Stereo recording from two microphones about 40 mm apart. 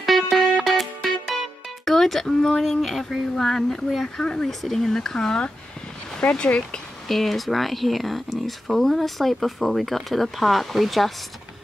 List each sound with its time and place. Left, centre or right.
0.0 s music: centre
1.3 s speech: centre; by 6.8 s left
7.1 s speech: centre